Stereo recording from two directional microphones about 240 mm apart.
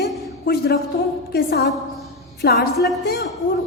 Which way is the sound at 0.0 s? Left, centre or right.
Left.